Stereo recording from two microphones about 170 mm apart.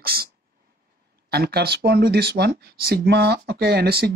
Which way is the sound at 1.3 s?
70° right (ahead or behind).